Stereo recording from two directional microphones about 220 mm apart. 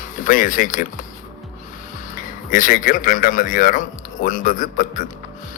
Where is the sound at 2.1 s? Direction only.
35° left (ahead or behind).